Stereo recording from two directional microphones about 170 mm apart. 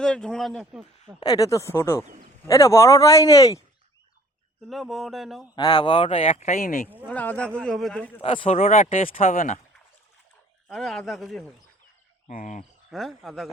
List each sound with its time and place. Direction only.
0.0 s speech: 5° left (ahead or behind)
1.2 s speech: 20° left (ahead or behind)
4.7 s speech: centre (ahead or behind)
5.5 s speech: 25° left (ahead or behind); by 6.8 s 55° left (ahead or behind)
7.1 s speech: 10° left (ahead or behind)
8.2 s speech: 35° left (ahead or behind); by 9.6 s 50° left (ahead or behind)
10.7 s speech: centre (ahead or behind)
12.3 s speech: 50° left (ahead or behind)
12.9 s speech: centre (ahead or behind)